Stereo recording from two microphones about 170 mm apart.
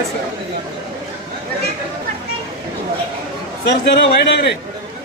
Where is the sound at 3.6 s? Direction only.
80° left.